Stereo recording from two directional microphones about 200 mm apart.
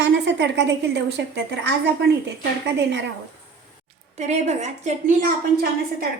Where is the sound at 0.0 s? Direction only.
60° right (ahead or behind).